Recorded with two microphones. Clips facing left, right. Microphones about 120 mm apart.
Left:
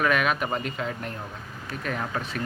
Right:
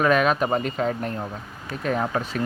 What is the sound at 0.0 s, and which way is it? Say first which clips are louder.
Speech: right 5 dB; 35° right (ahead or behind).